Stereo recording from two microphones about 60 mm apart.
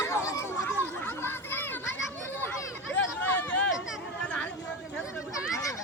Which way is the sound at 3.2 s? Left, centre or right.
Left.